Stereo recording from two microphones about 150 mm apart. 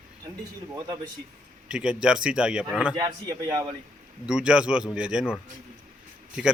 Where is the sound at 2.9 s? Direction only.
25° right (ahead or behind).